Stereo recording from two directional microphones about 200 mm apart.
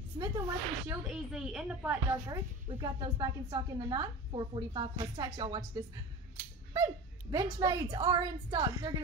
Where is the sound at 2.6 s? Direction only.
20° right (ahead or behind).